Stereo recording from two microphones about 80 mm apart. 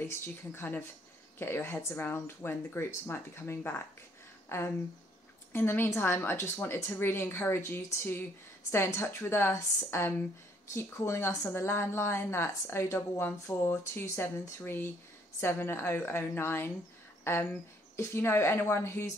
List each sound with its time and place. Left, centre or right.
0.0 s a woman's voice: left